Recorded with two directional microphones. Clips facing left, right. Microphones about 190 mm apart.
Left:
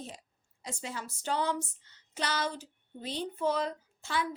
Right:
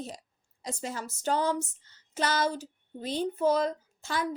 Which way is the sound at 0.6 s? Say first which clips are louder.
Right 4 dB; 40° right (ahead or behind).